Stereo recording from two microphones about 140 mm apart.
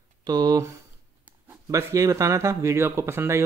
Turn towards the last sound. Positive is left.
turn(degrees=-20)  # may be behind; listen again after turning